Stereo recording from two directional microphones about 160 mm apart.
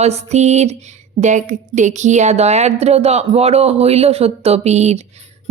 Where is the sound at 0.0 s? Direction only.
40° right (ahead or behind).